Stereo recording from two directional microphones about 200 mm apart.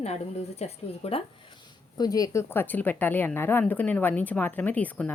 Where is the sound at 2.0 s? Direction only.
20° left (ahead or behind).